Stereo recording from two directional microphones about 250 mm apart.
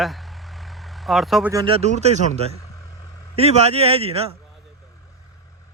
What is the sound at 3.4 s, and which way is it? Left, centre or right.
Speech, right.